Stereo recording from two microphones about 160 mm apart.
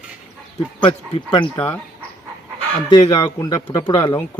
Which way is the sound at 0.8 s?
30° left (ahead or behind).